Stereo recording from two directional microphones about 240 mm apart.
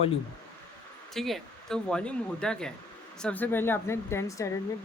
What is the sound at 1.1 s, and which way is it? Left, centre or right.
Speech, centre.